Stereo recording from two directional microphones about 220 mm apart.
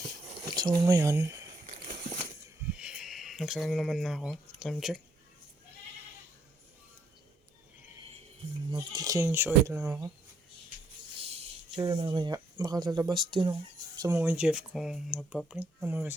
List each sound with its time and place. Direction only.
0.5 s speech: 20° right (ahead or behind)
2.7 s speech: 5° right (ahead or behind)
8.7 s speech: 20° right (ahead or behind)
11.2 s a sound: 25° right (ahead or behind)
11.8 s speech: 20° right (ahead or behind)
14.2 s speech: 5° right (ahead or behind)